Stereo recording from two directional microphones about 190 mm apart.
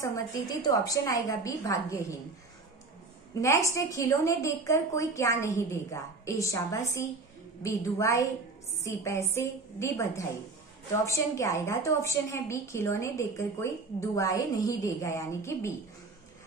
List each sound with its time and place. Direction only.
0.0 s a woman's voice: 20° left (ahead or behind)
3.3 s a woman's voice: 15° left (ahead or behind)